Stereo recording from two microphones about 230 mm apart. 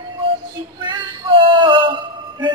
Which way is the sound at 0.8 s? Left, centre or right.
Right.